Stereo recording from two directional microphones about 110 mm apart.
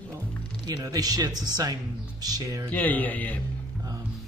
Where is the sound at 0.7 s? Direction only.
35° right (ahead or behind).